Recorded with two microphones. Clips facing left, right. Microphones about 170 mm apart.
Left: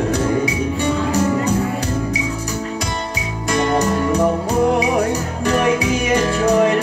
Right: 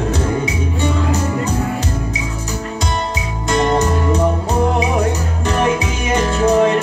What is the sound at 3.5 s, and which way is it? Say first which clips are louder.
Music: right 1 dB; 25° right (ahead or behind).